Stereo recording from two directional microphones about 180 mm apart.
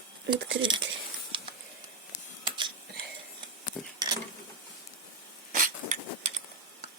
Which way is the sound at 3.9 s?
25° right (ahead or behind).